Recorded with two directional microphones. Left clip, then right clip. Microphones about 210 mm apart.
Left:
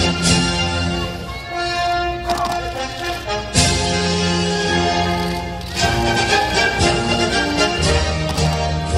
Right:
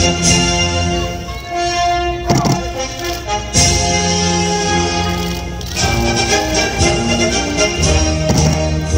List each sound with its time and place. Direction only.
0.0 s music: 30° right (ahead or behind)
3.3 s music: 30° right (ahead or behind)